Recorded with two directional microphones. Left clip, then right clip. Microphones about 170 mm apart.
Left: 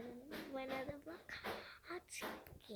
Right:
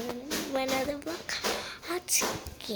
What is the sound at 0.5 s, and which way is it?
Speech, 15° right (ahead or behind).